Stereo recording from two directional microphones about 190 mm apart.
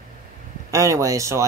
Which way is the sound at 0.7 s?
15° right (ahead or behind).